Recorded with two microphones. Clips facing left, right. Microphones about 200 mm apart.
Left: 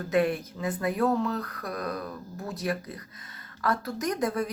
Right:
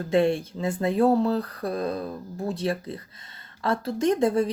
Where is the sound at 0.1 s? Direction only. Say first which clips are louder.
Right 4 dB; 25° right (ahead or behind).